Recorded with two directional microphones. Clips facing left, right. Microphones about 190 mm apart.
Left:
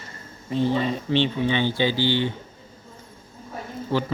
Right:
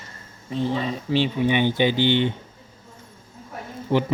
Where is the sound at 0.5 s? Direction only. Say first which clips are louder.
Left 2 dB; centre (ahead or behind); by 2.3 s 20° right (ahead or behind).